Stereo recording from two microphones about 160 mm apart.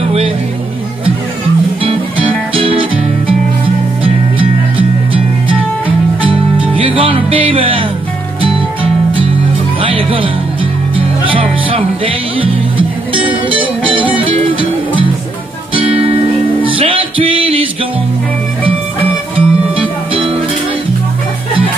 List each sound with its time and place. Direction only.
1.8 s music: 35° right (ahead or behind)
6.8 s music: 35° right (ahead or behind)
9.8 s music: 35° right (ahead or behind)
15.7 s music: 35° right (ahead or behind)
19.3 s music: 35° right (ahead or behind)